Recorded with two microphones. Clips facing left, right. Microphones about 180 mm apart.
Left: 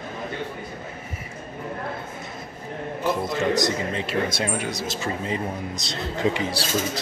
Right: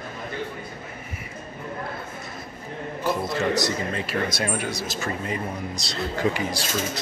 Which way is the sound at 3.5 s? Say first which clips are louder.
Left 2 dB; 20° left (ahead or behind).